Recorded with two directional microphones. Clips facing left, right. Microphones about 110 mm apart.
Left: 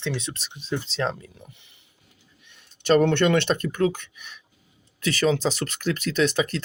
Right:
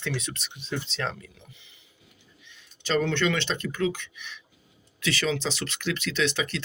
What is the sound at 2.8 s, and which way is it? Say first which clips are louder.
Speech: left 6 dB; 55° left (ahead or behind).